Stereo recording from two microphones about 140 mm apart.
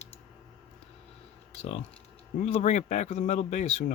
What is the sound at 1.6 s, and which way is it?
Speech, 50° left (ahead or behind).